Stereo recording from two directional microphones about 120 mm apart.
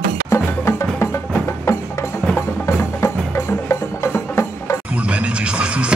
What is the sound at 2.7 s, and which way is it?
Music, 20° left (ahead or behind).